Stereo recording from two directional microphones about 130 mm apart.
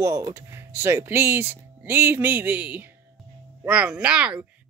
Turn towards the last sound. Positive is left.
turn(degrees=-10)  # may be behind; listen again after turning